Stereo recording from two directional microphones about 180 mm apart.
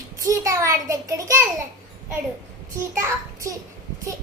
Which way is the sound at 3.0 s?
20° right (ahead or behind).